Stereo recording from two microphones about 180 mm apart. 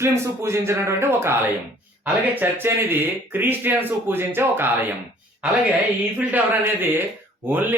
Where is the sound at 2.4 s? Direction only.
15° right (ahead or behind).